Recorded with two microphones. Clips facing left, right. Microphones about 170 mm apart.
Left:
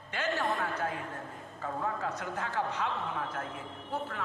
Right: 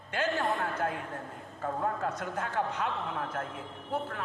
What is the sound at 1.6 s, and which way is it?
Speech, 50° right (ahead or behind).